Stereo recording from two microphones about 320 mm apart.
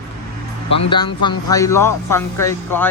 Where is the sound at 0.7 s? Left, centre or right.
Centre.